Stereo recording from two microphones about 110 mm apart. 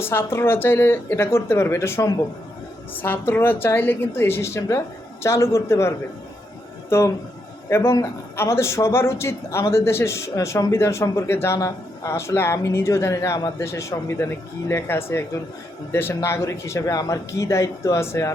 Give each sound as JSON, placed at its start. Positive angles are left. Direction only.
{"t": 0.0, "sound": "a man's voice", "side_deg": 20}
{"t": 6.9, "sound": "a man's voice", "side_deg": 20}